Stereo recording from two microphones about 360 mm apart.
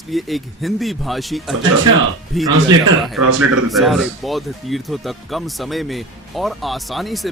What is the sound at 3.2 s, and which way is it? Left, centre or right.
Speech, right.